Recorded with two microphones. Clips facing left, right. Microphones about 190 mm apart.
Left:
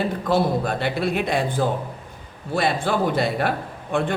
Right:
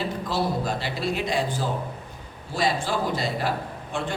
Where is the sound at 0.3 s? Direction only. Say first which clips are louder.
Left 6 dB; 55° left (ahead or behind).